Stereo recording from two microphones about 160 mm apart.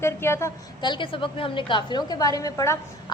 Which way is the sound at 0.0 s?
15° left (ahead or behind).